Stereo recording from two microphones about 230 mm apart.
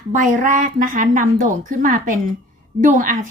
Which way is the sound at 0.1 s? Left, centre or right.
Right.